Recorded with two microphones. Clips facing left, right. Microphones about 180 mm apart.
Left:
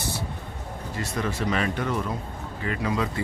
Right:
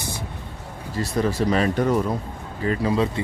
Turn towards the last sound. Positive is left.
turn(degrees=-30)  # may be behind; listen again after turning